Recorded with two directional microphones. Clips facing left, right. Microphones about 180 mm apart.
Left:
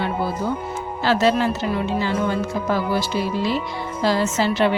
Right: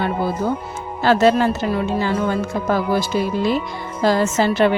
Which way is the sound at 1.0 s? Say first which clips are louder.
Right 4 dB; 50° right (ahead or behind).